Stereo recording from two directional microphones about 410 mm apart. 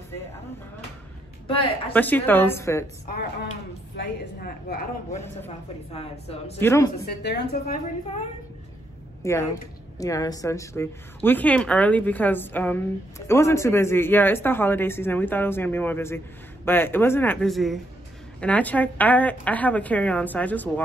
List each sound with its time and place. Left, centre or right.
1.5 s a woman's voice: centre
3.9 s a woman's voice: left; by 6.9 s centre
7.1 s a woman's voice: left
9.2 s a woman's voice: centre